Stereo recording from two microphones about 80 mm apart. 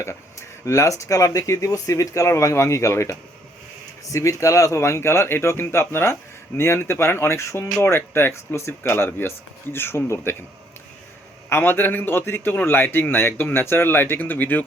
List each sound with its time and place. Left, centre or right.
0.0 s a man's voice: left
11.4 s a man's voice: left